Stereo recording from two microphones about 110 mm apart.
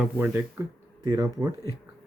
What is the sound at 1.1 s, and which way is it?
Speech, 35° right (ahead or behind).